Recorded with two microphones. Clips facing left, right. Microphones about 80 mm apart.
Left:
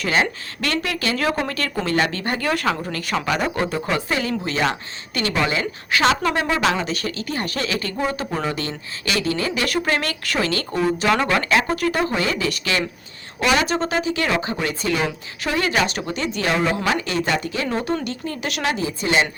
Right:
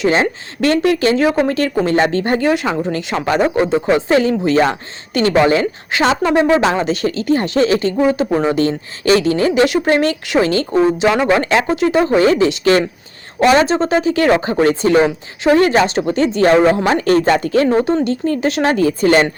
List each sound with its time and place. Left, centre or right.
0.0 s a woman's voice: right
1.1 s speech: right
2.5 s speech: centre
4.1 s a woman's voice: right
6.1 s a woman's voice: right
17.0 s a woman's voice: right
18.8 s speech: right